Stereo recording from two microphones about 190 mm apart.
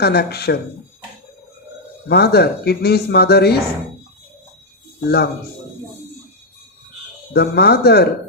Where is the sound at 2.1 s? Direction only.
60° left (ahead or behind).